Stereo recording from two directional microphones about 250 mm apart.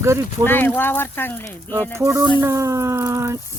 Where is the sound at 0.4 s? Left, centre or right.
Centre.